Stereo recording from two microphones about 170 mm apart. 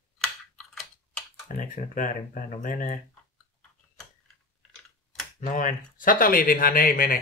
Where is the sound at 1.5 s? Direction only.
50° left (ahead or behind).